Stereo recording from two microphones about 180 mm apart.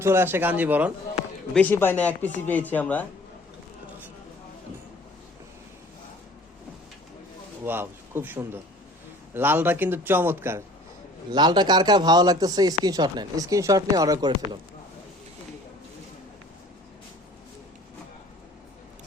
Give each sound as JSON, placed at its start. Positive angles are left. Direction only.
{"t": 0.0, "sound": "a man's voice", "side_deg": -15}
{"t": 1.5, "sound": "speech", "side_deg": 10}
{"t": 7.6, "sound": "a man's voice", "side_deg": -10}
{"t": 11.3, "sound": "a man's voice", "side_deg": -25}